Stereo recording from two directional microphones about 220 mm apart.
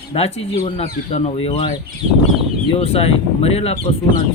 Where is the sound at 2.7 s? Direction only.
25° left (ahead or behind).